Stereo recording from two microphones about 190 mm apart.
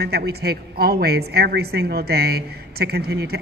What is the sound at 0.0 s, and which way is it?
A woman's voice, 60° right (ahead or behind).